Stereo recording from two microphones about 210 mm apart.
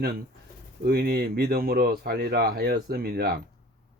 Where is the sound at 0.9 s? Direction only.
50° right (ahead or behind).